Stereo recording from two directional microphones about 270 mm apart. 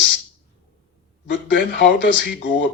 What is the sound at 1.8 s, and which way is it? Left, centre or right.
Speech, left.